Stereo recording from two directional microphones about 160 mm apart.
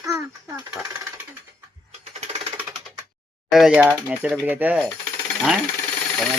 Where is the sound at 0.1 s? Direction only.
20° right (ahead or behind).